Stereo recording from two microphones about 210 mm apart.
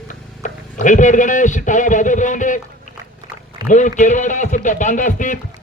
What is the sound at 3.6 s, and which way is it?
A man's voice, 35° left (ahead or behind).